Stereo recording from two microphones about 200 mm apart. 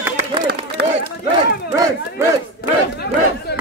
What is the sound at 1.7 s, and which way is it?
Speech, 15° right (ahead or behind).